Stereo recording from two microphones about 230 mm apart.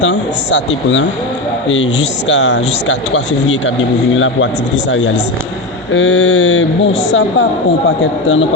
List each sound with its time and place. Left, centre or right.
0.0 s speech: left
2.2 s speech: left
5.9 s speech: left